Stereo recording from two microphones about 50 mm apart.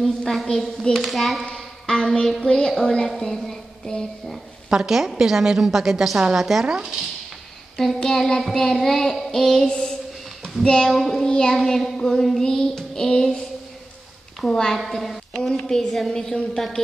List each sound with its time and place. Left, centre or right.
0.0 s a child's voice: centre
1.4 s music: centre
2.4 s child singing: centre
4.6 s a woman's voice: centre
7.7 s child singing: centre
10.4 s speech: centre
10.9 s a child's voice: centre
11.2 s child singing: centre
11.5 s child singing: centre
14.4 s child singing: centre
15.0 s a woman's voice: centre
15.6 s child singing: centre